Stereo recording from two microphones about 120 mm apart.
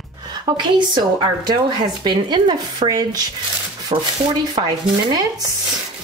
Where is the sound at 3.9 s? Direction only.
55° right (ahead or behind).